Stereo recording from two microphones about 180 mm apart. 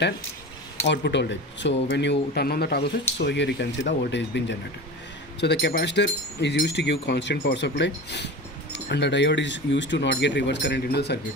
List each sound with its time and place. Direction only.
0.9 s speech: 75° left (ahead or behind)
3.2 s speech: 75° left (ahead or behind)